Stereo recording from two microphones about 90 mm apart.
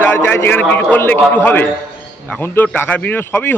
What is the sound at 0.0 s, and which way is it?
A man's voice, 25° left (ahead or behind).